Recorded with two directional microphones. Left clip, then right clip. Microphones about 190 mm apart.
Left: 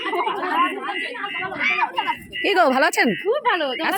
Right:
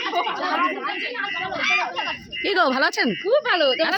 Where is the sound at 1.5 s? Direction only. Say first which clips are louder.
Left 1 dB; 15° right (ahead or behind).